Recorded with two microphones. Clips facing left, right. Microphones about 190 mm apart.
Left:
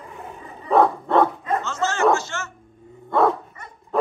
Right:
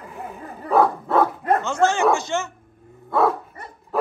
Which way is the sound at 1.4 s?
60° right (ahead or behind).